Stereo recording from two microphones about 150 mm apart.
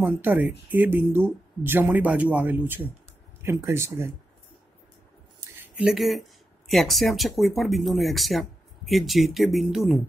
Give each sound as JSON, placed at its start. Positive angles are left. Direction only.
{"t": 0.0, "sound": "speech", "side_deg": -10}
{"t": 5.6, "sound": "speech", "side_deg": -5}